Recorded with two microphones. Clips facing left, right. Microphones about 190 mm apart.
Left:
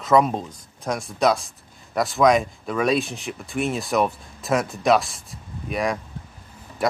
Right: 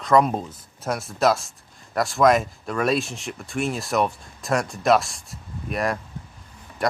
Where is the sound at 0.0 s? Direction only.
Centre (ahead or behind).